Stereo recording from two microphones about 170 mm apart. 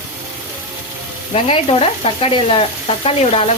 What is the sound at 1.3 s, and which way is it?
Frying, 35° left (ahead or behind).